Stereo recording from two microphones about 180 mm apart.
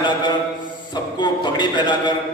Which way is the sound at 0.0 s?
25° left (ahead or behind).